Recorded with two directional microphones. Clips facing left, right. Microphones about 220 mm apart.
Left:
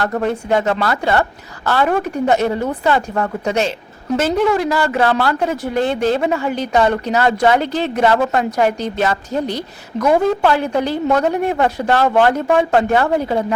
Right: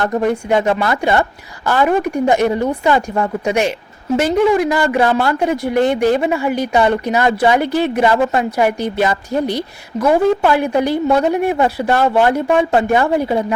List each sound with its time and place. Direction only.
0.2 s speech: 15° right (ahead or behind)